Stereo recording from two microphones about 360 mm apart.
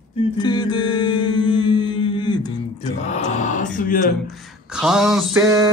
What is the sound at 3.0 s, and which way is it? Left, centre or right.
Mantra, centre.